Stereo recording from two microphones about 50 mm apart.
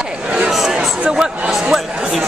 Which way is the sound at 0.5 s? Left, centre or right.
Centre.